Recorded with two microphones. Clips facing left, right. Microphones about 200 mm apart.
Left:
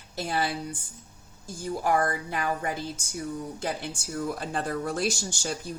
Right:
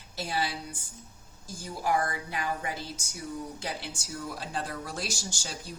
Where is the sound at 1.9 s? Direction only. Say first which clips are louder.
Left 3 dB; 50° left (ahead or behind).